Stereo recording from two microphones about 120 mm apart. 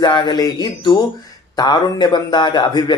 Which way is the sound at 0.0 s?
40° left (ahead or behind).